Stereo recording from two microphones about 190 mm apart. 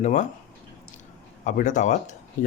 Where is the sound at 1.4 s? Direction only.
40° left (ahead or behind).